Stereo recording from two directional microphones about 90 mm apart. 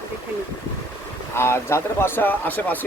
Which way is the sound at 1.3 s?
30° left (ahead or behind).